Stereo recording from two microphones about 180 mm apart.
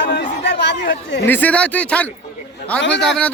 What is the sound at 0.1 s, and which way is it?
Chatter, 70° left (ahead or behind).